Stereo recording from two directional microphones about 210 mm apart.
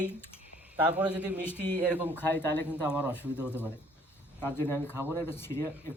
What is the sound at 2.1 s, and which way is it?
Speech, 10° left (ahead or behind).